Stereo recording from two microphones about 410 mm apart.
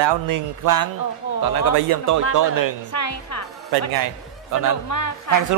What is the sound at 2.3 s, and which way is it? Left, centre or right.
Speech, right.